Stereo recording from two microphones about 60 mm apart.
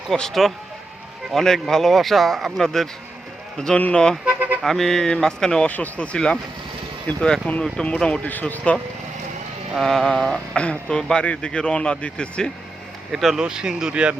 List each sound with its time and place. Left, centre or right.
0.1 s speech: centre
4.4 s vehicle: right
4.6 s speech: centre
5.6 s speech: left
6.1 s speech: centre
7.1 s speech: left
7.6 s speech: centre
8.3 s speech: left
9.7 s speech: centre
13.1 s speech: centre